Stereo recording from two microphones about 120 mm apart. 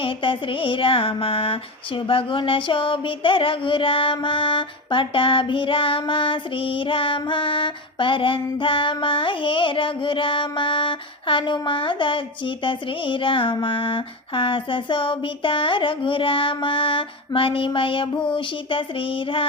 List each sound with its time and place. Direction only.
0.0 s mantra: 45° left (ahead or behind)